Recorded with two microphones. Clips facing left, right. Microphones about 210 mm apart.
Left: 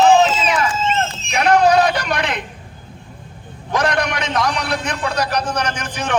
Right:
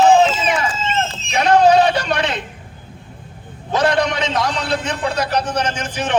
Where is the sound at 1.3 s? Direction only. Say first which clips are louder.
Right 1 dB; 25° right (ahead or behind).